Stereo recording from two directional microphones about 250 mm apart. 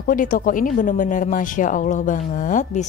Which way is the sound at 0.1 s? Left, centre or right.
Left.